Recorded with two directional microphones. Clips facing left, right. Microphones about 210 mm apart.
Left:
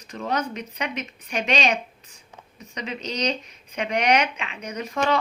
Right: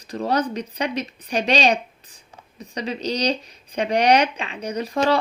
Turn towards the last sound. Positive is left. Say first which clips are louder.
# right 4 dB
turn(degrees=-35)  # may be behind; listen again after turning